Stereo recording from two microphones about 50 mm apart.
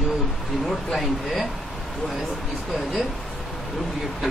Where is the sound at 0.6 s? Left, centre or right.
Centre.